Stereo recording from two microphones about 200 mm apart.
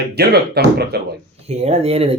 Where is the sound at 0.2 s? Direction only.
55° right (ahead or behind).